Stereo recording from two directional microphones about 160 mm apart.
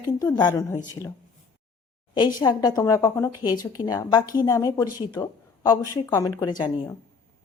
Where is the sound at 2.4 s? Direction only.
25° left (ahead or behind).